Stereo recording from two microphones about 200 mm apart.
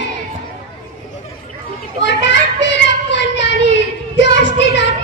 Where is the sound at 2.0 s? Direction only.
60° left (ahead or behind).